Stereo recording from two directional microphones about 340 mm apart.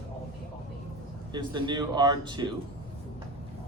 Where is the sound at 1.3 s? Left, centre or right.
Centre.